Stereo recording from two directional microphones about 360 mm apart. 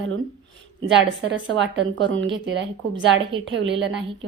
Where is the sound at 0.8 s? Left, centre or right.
Right.